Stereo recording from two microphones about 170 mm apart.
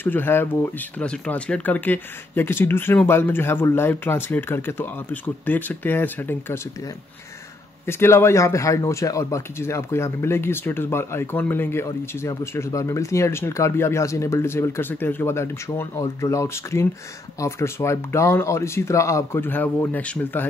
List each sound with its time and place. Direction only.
0.0 s a man's voice: 10° left (ahead or behind)
7.8 s a man's voice: 15° left (ahead or behind)